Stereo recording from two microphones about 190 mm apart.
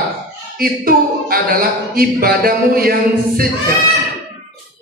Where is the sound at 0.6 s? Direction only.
50° right (ahead or behind).